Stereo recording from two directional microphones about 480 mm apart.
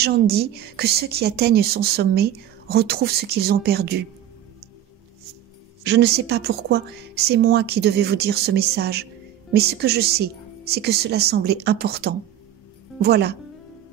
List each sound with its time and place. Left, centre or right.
0.0 s speech: centre
5.9 s speech: right